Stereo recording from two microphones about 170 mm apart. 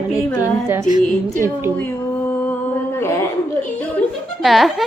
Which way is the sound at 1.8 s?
10° left (ahead or behind).